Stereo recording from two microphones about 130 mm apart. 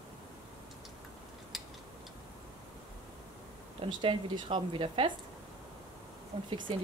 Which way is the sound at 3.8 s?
40° right (ahead or behind).